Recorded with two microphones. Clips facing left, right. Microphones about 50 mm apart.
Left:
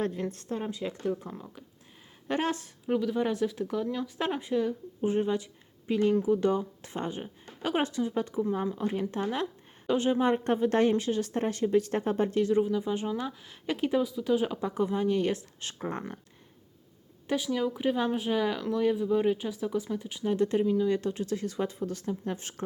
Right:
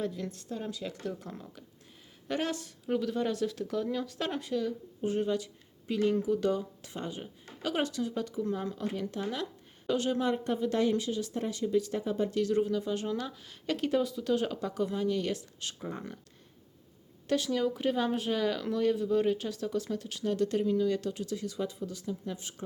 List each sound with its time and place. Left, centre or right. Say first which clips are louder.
0.0 s speech: left 4 dB; left
2.8 s speech: left 3 dB; centre; by 12.4 s left
12.4 s speech: left 2 dB; left
14.7 s speech: left 4 dB; left
15.8 s speech: left 6 dB; left
17.2 s speech: even; centre
20.9 s speech: left 3 dB; left